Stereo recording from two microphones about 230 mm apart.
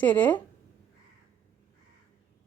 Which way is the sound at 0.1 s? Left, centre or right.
Centre.